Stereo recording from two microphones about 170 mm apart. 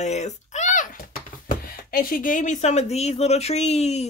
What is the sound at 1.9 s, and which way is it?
Speech, 60° left (ahead or behind).